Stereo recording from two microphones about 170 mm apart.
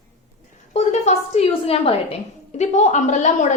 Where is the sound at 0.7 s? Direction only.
40° left (ahead or behind).